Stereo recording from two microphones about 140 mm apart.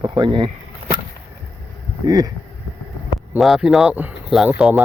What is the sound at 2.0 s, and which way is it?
Speech, 25° right (ahead or behind).